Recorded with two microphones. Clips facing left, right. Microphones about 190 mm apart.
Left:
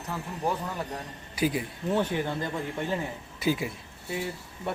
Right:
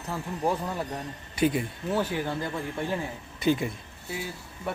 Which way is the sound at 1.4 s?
Centre (ahead or behind).